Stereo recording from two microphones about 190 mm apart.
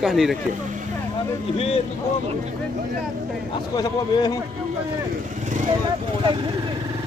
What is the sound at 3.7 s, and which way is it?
Speech, 20° left (ahead or behind).